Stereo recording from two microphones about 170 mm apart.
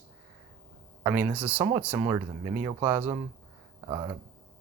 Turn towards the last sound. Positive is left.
turn(degrees=-25)  # may be behind; listen again after turning